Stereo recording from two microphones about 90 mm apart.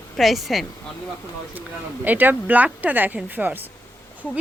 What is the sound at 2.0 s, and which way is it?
Speech, 20° right (ahead or behind).